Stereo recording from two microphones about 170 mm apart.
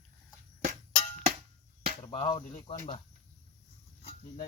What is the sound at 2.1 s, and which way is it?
Speech, 35° left (ahead or behind).